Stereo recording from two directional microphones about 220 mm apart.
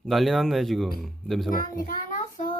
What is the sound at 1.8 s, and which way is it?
Child singing, 40° left (ahead or behind).